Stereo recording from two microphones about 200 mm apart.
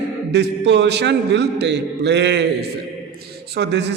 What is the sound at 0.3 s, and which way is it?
A man's voice, 60° right (ahead or behind).